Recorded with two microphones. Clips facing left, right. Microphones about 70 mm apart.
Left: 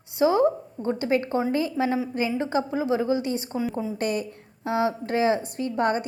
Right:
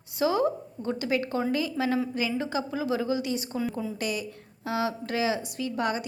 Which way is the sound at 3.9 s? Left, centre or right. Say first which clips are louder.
Left 5 dB; left.